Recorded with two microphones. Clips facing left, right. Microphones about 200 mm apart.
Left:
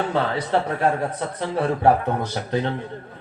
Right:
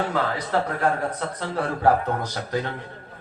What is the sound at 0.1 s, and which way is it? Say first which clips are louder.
Speech: left 3 dB; 25° left (ahead or behind).